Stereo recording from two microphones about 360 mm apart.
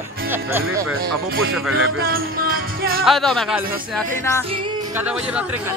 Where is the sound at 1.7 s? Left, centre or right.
Right.